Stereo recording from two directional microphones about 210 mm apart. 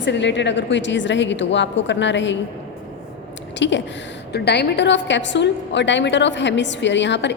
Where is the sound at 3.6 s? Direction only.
60° left (ahead or behind).